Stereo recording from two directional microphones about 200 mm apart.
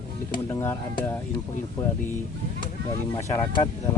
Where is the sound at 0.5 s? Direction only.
15° left (ahead or behind).